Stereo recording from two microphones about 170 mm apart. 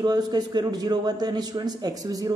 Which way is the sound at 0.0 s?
25° right (ahead or behind).